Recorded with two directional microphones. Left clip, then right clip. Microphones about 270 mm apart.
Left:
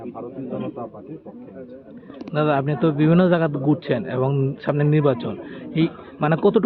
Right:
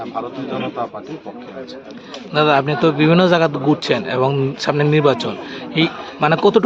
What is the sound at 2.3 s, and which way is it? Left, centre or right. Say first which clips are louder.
A man's voice: right 6 dB; centre.